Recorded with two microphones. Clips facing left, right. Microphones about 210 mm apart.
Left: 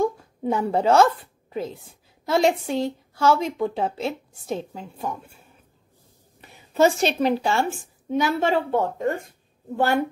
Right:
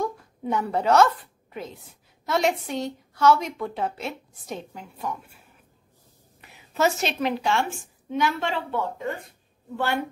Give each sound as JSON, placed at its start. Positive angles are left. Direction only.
{"t": 0.0, "sound": "a sound", "side_deg": 30}
{"t": 1.5, "sound": "a woman's voice", "side_deg": 30}
{"t": 6.8, "sound": "a woman's voice", "side_deg": 30}